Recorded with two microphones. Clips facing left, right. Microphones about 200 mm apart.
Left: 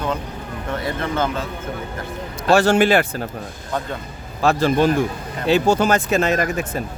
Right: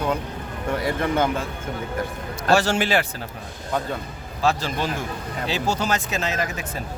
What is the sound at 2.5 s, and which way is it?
Speech, 55° left (ahead or behind).